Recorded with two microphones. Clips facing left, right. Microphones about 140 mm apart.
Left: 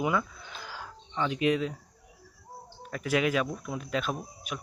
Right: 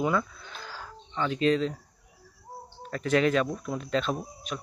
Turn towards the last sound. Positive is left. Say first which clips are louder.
# right 3 dB
turn(degrees=10)  # may be behind; listen again after turning